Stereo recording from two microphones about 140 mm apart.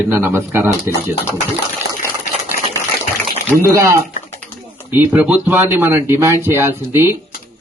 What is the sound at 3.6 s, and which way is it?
Speech, 20° right (ahead or behind).